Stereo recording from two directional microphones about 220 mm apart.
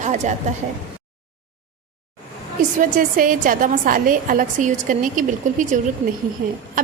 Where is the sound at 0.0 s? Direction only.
35° right (ahead or behind).